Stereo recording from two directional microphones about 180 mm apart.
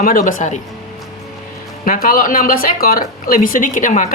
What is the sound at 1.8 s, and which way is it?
Speech, 50° left (ahead or behind).